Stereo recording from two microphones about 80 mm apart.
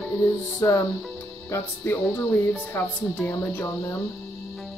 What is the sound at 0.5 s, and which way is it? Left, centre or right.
Music, left.